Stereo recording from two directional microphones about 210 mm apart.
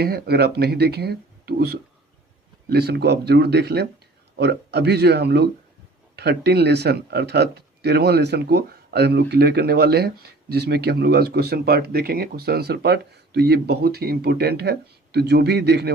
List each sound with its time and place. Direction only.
0.0 s speech: 50° right (ahead or behind)